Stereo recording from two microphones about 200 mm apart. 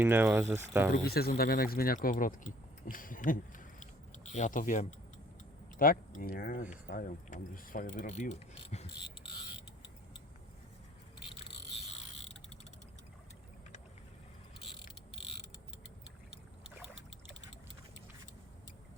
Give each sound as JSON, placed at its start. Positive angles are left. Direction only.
{"t": 0.0, "sound": "speech", "side_deg": -10}
{"t": 1.0, "sound": "speech", "side_deg": 50}
{"t": 11.3, "sound": "insect", "side_deg": 30}
{"t": 16.6, "sound": "boat", "side_deg": 0}